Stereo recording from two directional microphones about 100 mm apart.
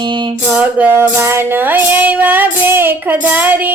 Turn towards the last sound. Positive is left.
turn(degrees=-20)  # may be behind; listen again after turning